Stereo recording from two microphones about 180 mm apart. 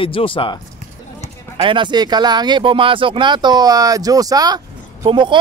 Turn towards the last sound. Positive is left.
turn(degrees=-25)  # may be behind; listen again after turning